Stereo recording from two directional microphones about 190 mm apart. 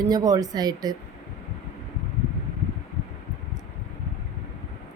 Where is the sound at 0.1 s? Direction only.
20° right (ahead or behind).